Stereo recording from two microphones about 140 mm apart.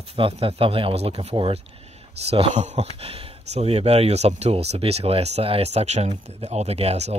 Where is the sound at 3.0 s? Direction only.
45° right (ahead or behind).